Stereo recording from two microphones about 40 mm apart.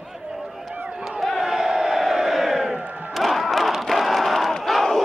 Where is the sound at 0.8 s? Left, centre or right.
Centre.